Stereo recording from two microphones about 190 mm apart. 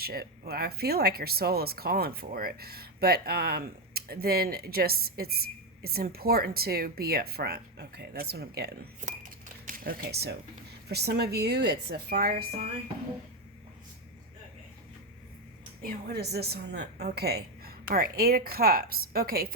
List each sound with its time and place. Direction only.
0.0 s speech: 55° right (ahead or behind)
9.0 s chink: 40° right (ahead or behind); by 10.3 s 60° right (ahead or behind)
10.8 s speech: 60° right (ahead or behind)
15.8 s speech: 60° right (ahead or behind)